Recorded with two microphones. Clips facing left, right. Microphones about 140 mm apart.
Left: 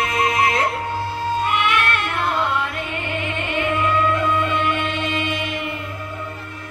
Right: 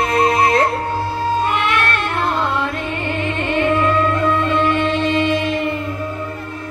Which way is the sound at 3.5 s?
35° right (ahead or behind).